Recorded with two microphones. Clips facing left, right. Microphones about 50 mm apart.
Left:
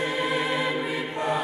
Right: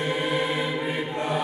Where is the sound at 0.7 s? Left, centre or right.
Right.